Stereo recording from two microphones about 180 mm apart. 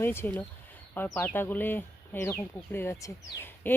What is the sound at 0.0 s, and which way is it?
A woman's voice, 10° left (ahead or behind).